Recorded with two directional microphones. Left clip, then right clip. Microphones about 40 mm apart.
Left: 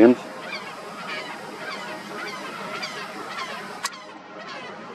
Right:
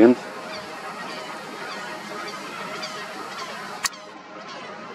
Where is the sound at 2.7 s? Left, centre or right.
Left.